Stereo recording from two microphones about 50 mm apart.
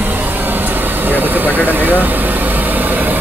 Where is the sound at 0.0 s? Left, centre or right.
Right.